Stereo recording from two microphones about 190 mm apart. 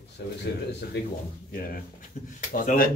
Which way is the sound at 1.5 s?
50° left (ahead or behind).